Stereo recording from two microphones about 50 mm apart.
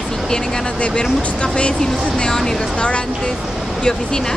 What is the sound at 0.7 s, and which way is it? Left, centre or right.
Speech, left.